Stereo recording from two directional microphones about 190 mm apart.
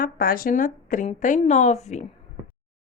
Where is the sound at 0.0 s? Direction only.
50° left (ahead or behind).